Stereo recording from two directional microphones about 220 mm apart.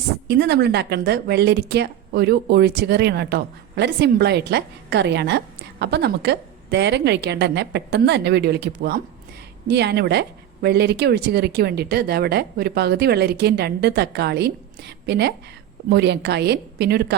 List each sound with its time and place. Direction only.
0.3 s a woman's voice: 50° right (ahead or behind)